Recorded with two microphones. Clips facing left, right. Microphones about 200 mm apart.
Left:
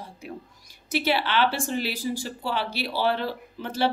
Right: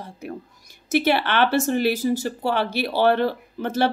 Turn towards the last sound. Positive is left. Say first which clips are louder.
# right 4 dB
turn(degrees=-50)  # may be behind; listen again after turning